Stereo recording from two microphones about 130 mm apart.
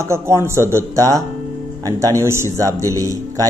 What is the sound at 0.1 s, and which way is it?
Speech, 20° right (ahead or behind).